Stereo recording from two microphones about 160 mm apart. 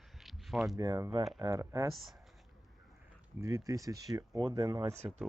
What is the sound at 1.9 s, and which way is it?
Speech, centre (ahead or behind).